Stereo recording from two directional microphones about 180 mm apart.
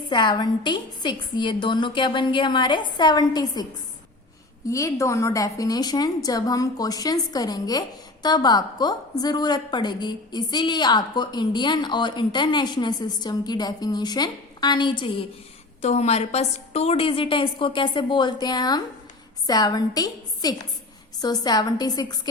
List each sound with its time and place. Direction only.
0.1 s a woman's voice: 25° left (ahead or behind)
4.7 s a woman's voice: 15° left (ahead or behind)